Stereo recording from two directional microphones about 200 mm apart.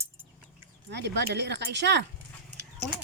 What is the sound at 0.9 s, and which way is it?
Speech, 60° right (ahead or behind).